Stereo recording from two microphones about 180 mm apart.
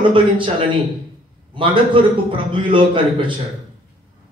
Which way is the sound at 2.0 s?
30° right (ahead or behind).